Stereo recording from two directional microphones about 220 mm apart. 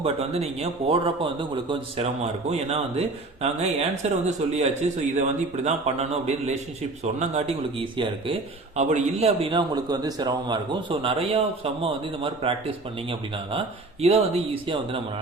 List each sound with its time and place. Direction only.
0.0 s speech: 30° right (ahead or behind)